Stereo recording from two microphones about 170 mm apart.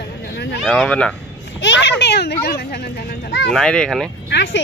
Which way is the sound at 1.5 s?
90° left.